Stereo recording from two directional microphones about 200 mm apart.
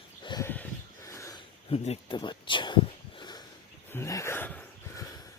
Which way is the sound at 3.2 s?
20° left (ahead or behind).